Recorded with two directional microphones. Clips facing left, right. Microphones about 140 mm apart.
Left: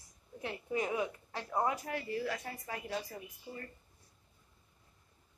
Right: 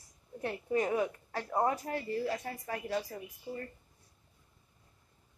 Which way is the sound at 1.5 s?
30° right (ahead or behind).